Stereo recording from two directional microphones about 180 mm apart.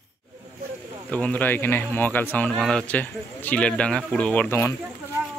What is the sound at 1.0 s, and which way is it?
Speech, 5° left (ahead or behind).